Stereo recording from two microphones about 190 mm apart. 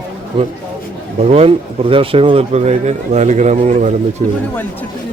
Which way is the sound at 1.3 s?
30° right (ahead or behind).